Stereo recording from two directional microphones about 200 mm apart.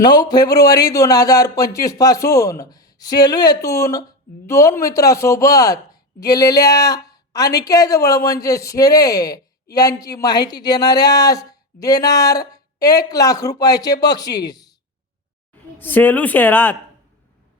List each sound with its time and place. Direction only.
0.0 s speech: 20° left (ahead or behind)
15.8 s speech: 10° left (ahead or behind)